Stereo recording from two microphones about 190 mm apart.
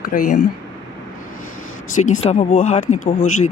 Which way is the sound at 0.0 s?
45° left (ahead or behind).